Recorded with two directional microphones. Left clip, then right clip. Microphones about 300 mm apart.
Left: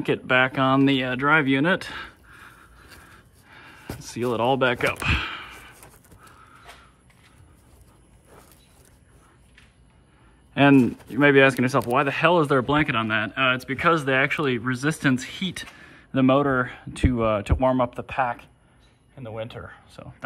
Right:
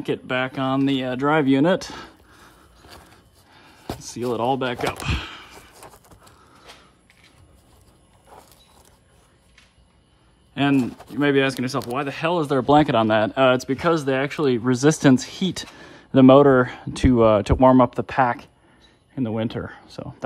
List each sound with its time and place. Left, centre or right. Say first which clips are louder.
0.0 s speech: left 4 dB; centre
2.9 s a sound: right 5 dB; centre
10.5 s speech: left 4 dB; centre; by 20.2 s right